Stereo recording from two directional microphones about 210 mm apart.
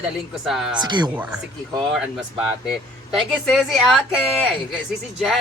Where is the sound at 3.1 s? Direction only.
Centre (ahead or behind).